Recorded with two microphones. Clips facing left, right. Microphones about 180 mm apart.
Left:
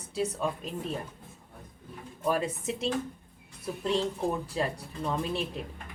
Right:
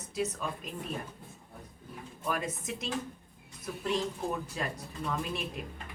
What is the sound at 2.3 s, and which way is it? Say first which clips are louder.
A woman's voice: left 5 dB; 30° left (ahead or behind).